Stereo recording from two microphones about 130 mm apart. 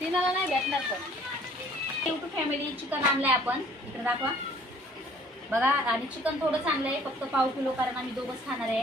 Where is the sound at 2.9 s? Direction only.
10° right (ahead or behind).